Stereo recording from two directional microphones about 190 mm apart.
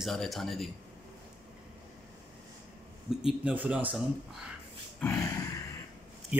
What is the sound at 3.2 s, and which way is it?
Speech, 10° right (ahead or behind).